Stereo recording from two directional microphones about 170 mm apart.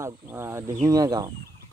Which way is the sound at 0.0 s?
15° right (ahead or behind).